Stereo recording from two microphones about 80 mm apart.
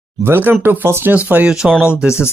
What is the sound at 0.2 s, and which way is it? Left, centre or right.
Speech, right.